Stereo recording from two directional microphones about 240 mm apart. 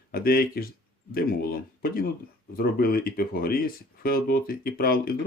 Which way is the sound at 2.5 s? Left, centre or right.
Left.